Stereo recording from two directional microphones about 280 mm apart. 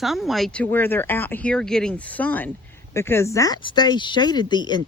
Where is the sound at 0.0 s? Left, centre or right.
Centre.